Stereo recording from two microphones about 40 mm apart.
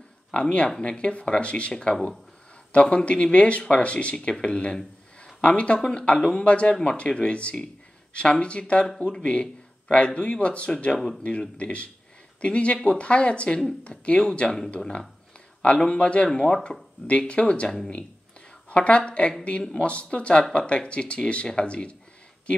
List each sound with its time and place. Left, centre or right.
0.3 s a man's voice: left
4.7 s a sound: left
5.9 s speech: left
15.6 s speech: left
18.7 s speech: left